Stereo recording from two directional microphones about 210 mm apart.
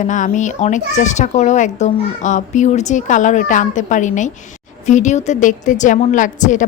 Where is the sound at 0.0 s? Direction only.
35° left (ahead or behind).